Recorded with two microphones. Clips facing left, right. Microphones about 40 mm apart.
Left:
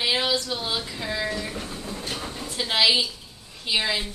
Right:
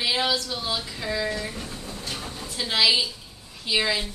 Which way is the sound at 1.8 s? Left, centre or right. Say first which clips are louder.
Left 2 dB; left.